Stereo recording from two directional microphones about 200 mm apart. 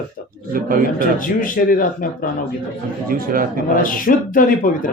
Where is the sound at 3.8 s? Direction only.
45° left (ahead or behind).